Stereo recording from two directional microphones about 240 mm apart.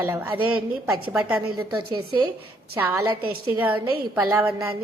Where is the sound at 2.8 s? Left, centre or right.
Centre.